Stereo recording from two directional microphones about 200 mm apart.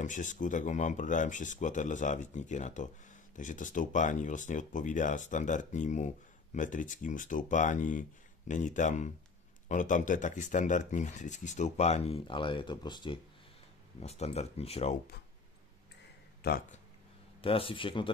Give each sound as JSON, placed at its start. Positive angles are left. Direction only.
{"t": 0.0, "sound": "speech", "side_deg": 40}
{"t": 16.4, "sound": "speech", "side_deg": 55}
{"t": 17.4, "sound": "speech", "side_deg": 25}